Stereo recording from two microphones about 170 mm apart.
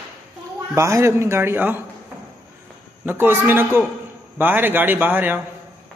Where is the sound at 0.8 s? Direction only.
15° right (ahead or behind).